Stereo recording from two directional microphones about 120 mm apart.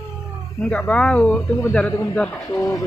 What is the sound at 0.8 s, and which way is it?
Speech, 10° left (ahead or behind).